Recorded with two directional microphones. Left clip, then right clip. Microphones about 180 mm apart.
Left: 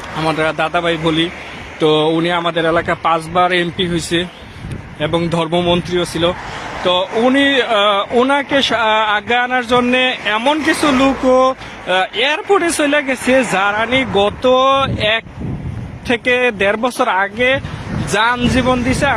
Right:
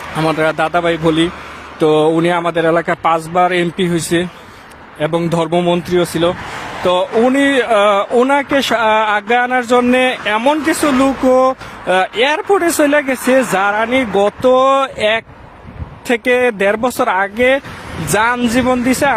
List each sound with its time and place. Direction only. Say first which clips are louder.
0.2 s speech: right 2 dB; 45° right (ahead or behind)
14.2 s speech: right 2 dB; 45° right (ahead or behind)